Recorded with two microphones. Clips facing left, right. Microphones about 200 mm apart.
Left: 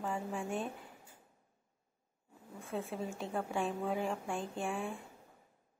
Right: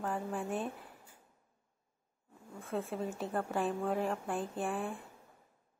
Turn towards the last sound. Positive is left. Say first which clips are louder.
# right 2 dB
turn(degrees=0)  # may be behind; listen again after turning